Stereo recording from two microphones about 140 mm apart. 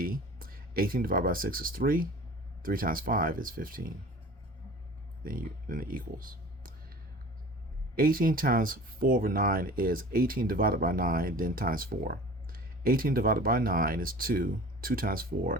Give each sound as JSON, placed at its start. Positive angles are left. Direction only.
{"t": 0.0, "sound": "speech", "side_deg": -90}
{"t": 5.2, "sound": "speech", "side_deg": -90}
{"t": 7.9, "sound": "speech", "side_deg": -90}